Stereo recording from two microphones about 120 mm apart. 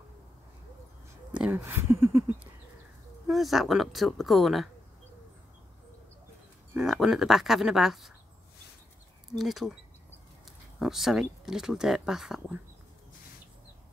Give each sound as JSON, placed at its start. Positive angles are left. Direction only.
{"t": 1.3, "sound": "speech", "side_deg": -10}
{"t": 3.3, "sound": "speech", "side_deg": 0}
{"t": 6.7, "sound": "speech", "side_deg": -5}
{"t": 9.3, "sound": "speech", "side_deg": 0}
{"t": 10.8, "sound": "speech", "side_deg": -5}